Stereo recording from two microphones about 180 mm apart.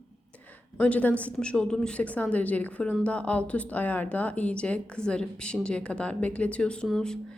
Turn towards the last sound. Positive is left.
turn(degrees=5)  # may be behind; listen again after turning